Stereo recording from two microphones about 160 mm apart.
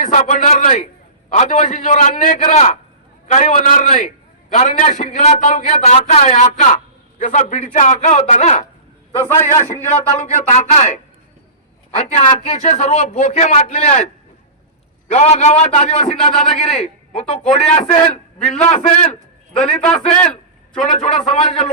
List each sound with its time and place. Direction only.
0.0 s a man's voice: 50° left (ahead or behind)
9.2 s a man's voice: 15° left (ahead or behind)
9.6 s a man's voice: 50° left (ahead or behind)
15.1 s a man's voice: 45° left (ahead or behind)
19.5 s a man's voice: 5° left (ahead or behind)
20.9 s a man's voice: 45° left (ahead or behind)